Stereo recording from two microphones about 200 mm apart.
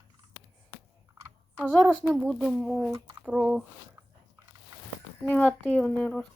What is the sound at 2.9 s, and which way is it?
Speech, 20° right (ahead or behind).